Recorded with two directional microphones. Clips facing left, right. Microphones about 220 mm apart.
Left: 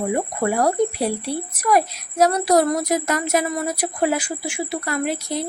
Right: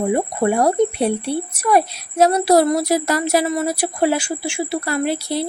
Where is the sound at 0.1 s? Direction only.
25° right (ahead or behind).